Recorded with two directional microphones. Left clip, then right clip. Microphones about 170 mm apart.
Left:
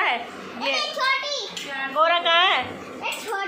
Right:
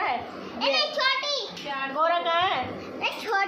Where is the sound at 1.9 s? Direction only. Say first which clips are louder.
Left 5 dB; 20° left (ahead or behind).